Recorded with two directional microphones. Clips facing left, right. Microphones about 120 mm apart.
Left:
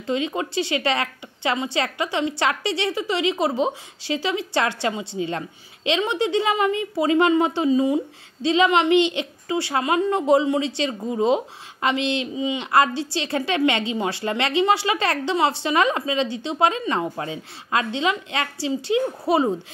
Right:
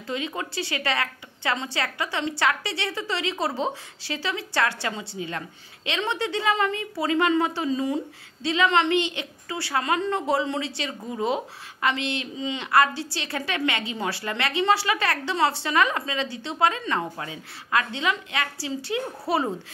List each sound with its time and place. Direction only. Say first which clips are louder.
0.0 s a woman's voice: left 6 dB; 25° left (ahead or behind)